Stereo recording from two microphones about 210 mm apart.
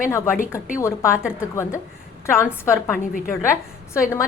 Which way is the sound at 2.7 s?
10° left (ahead or behind).